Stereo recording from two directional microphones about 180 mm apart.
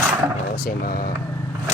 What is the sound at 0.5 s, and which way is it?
Speech, 55° left (ahead or behind).